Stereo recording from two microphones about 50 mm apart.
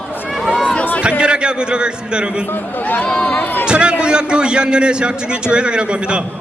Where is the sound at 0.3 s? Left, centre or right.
Centre.